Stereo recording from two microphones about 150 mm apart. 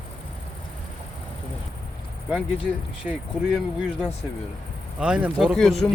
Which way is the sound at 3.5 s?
5° right (ahead or behind).